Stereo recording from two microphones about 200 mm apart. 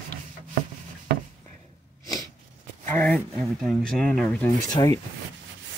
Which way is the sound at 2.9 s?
5° left (ahead or behind).